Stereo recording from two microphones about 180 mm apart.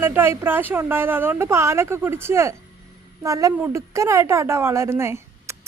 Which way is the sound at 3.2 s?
20° right (ahead or behind).